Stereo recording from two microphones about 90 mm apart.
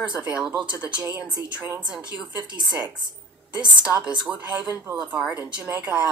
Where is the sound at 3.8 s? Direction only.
10° right (ahead or behind).